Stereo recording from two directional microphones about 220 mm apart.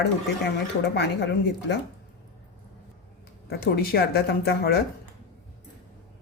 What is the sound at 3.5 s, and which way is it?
Speech, 45° left (ahead or behind).